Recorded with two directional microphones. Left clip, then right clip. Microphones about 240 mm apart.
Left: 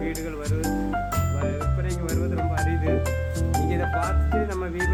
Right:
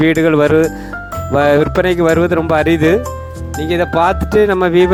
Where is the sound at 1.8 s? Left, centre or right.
Right.